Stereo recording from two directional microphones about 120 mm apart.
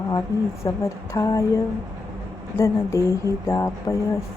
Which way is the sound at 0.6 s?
25° left (ahead or behind).